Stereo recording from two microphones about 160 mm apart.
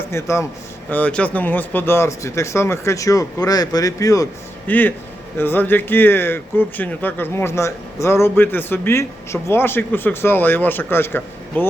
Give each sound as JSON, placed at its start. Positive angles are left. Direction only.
{"t": 0.1, "sound": "speech", "side_deg": 15}